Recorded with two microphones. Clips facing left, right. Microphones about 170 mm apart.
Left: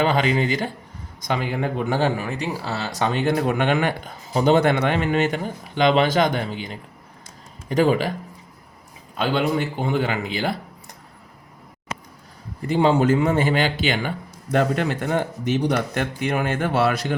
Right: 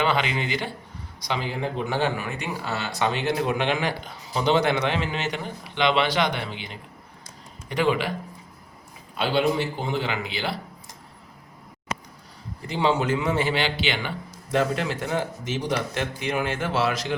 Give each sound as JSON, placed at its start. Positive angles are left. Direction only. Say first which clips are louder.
{"t": 0.0, "sound": "a man's voice", "louder": "left 5 dB", "side_deg": 40}
{"t": 9.1, "sound": "speech", "louder": "left 1 dB", "side_deg": 50}
{"t": 12.6, "sound": "speech", "louder": "left 6 dB", "side_deg": 50}